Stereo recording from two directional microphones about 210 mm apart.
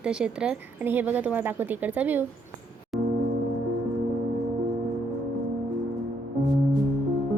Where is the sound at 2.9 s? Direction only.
Centre (ahead or behind).